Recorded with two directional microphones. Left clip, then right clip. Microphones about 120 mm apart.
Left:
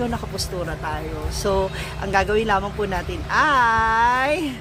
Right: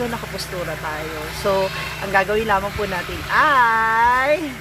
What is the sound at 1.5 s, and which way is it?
Speech, 40° left (ahead or behind).